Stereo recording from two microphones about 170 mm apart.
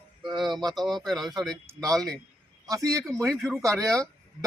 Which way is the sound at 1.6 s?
20° right (ahead or behind).